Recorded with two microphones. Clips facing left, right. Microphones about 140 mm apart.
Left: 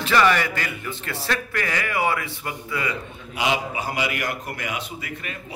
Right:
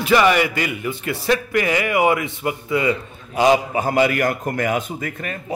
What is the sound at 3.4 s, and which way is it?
A man's voice, 45° right (ahead or behind).